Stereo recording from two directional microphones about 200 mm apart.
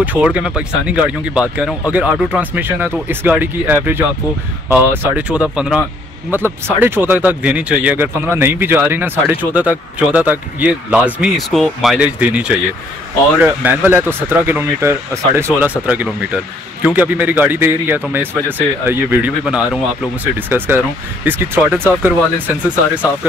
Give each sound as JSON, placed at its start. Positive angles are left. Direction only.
{"t": 0.0, "sound": "speech", "side_deg": -5}